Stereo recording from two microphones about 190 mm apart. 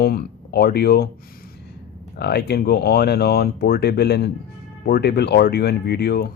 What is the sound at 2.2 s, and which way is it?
Speech, 60° left (ahead or behind).